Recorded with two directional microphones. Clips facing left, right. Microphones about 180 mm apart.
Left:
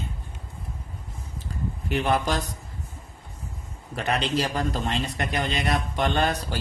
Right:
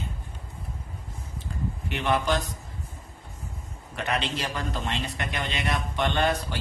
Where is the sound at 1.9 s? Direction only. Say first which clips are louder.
Left 2 dB; 35° left (ahead or behind).